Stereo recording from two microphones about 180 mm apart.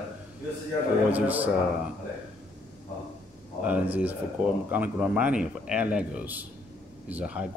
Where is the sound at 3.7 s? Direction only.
10° right (ahead or behind).